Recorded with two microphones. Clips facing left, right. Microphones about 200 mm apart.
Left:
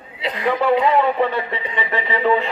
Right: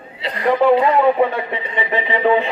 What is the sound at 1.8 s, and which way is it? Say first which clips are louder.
Speech: right 3 dB; 20° right (ahead or behind).